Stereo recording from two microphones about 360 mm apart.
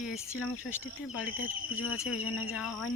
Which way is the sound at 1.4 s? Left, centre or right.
Left.